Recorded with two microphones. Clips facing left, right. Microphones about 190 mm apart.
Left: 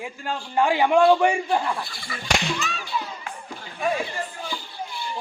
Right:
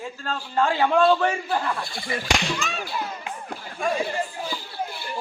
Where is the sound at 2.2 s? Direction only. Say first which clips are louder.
Left 2 dB; 60° right (ahead or behind).